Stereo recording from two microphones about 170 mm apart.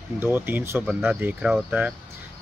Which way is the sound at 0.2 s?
10° right (ahead or behind).